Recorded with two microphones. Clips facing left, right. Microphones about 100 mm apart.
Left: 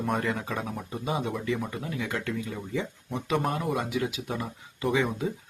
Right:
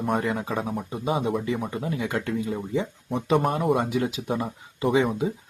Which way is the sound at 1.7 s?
30° right (ahead or behind).